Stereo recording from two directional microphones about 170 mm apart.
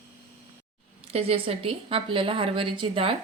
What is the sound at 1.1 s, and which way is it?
A woman's voice, 35° right (ahead or behind).